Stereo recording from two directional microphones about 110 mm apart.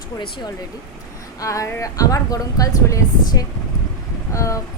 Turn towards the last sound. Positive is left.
turn(degrees=30)  # may be behind; listen again after turning